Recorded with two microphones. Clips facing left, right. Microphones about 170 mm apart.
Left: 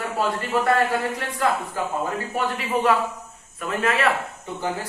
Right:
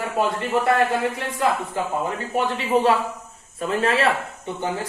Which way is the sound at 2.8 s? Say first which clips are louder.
Right 2 dB; 30° right (ahead or behind).